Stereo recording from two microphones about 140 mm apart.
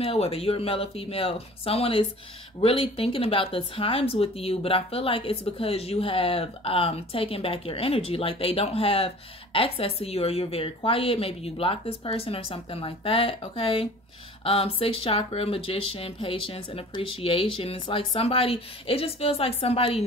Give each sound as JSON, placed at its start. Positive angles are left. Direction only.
{"t": 0.0, "sound": "speech", "side_deg": 45}